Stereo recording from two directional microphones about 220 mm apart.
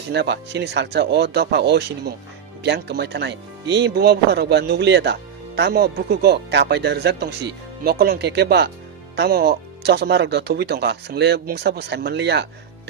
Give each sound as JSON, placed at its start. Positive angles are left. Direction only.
{"t": 0.1, "sound": "speech", "side_deg": -50}